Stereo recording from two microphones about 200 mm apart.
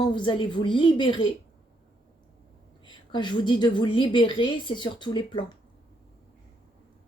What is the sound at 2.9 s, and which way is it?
Speech, 25° left (ahead or behind).